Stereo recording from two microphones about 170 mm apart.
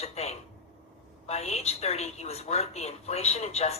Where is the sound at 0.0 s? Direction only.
40° left (ahead or behind).